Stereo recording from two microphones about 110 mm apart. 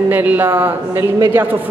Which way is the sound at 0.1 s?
15° right (ahead or behind).